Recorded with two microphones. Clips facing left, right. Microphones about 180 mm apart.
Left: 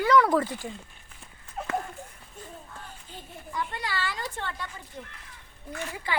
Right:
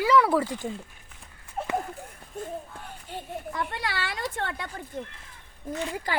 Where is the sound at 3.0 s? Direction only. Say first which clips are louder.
Right 8 dB; 65° right (ahead or behind); by 5.1 s 50° right (ahead or behind).